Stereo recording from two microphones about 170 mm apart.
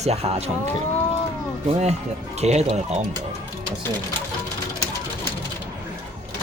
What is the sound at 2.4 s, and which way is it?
Speech, 40° right (ahead or behind).